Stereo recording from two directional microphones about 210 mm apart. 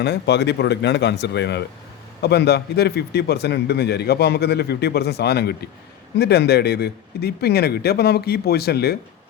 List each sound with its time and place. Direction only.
0.0 s a man's voice: 55° left (ahead or behind)